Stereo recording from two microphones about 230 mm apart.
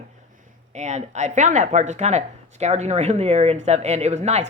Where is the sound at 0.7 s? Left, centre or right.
Right.